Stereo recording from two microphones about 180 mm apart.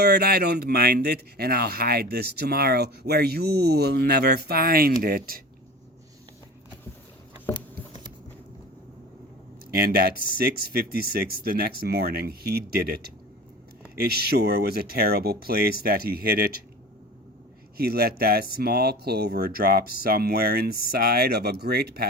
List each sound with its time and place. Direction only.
0.0 s speech: 60° right (ahead or behind)
10.3 s speech: 60° right (ahead or behind)
17.7 s speech: 60° right (ahead or behind)